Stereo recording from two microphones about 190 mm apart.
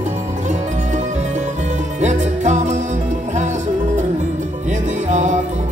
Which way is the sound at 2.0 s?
40° right (ahead or behind).